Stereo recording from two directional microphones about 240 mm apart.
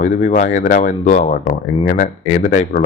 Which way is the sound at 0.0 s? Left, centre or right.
Left.